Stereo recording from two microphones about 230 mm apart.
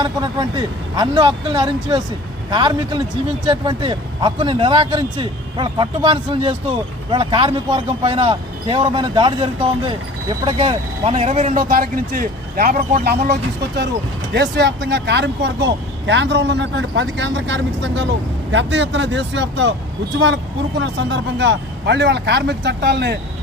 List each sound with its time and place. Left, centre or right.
0.0 s speech: centre; by 23.1 s right